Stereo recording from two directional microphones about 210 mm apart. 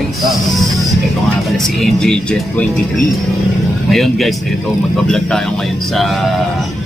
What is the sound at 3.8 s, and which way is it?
A man's voice, centre (ahead or behind).